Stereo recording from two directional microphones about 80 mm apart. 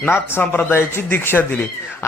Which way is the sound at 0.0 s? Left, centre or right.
Left.